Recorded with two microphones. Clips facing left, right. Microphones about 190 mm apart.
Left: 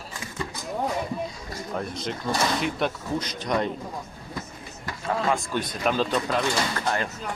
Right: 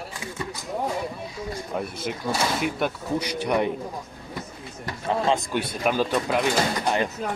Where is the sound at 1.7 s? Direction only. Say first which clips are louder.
Left 1 dB; 10° right (ahead or behind).